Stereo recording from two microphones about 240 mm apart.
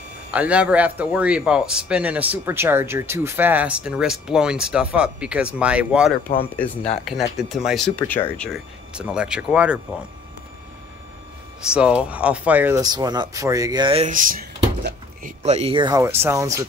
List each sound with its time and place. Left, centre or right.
0.3 s a man's voice: centre
6.5 s a man's voice: centre
11.7 s speech: centre; by 15.3 s right
15.4 s speech: right